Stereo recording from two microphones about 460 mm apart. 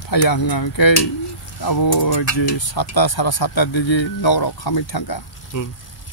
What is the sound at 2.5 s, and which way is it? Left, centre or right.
Speech, left.